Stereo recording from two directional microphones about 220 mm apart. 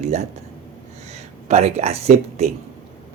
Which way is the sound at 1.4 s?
30° right (ahead or behind).